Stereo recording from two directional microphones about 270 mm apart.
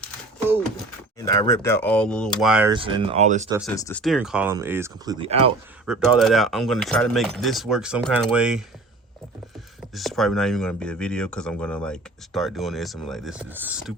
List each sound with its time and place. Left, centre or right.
1.2 s speech: centre
2.7 s speech: centre
3.8 s speech: centre
4.0 s speech: centre
5.8 s speech: centre
9.9 s speech: centre